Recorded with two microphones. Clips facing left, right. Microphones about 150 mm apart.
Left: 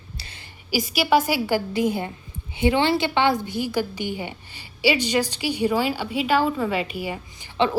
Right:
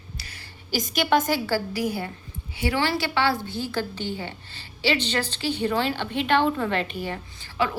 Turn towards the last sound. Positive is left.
turn(degrees=20)  # may be behind; listen again after turning